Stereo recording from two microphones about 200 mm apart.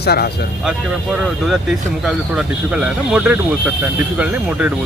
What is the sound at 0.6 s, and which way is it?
Speech, 5° right (ahead or behind).